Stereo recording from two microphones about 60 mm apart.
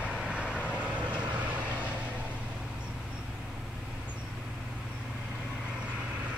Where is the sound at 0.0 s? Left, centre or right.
Centre.